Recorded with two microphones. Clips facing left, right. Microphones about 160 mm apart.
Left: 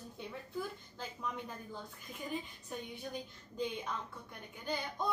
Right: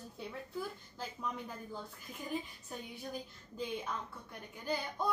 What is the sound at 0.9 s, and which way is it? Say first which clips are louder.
Speech: right 1 dB; 5° right (ahead or behind).